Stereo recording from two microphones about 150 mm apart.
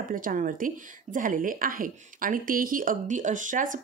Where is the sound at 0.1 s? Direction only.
65° right (ahead or behind).